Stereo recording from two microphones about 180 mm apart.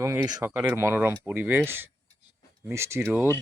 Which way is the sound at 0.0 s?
15° right (ahead or behind).